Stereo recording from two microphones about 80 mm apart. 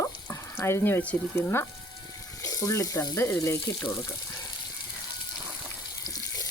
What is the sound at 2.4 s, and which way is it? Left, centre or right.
Water, left.